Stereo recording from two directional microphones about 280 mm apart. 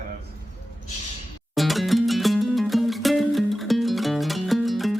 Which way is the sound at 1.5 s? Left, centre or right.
Centre.